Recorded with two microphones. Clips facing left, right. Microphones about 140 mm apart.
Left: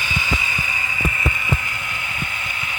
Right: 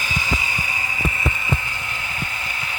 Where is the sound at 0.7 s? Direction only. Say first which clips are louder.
Left 1 dB; 40° right (ahead or behind).